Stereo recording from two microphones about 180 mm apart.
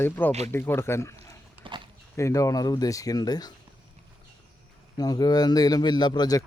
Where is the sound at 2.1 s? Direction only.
15° left (ahead or behind).